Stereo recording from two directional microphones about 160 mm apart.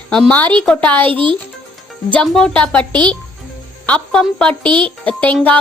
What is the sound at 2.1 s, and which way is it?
A woman's voice, 5° left (ahead or behind).